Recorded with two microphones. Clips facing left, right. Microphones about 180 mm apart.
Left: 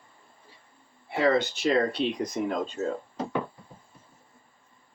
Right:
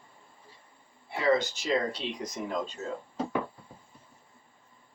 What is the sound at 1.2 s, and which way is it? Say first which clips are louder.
Speech: left 3 dB; 60° left (ahead or behind).